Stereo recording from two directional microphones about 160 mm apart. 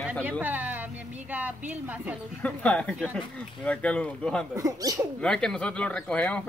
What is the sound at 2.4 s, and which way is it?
Speech, 10° left (ahead or behind).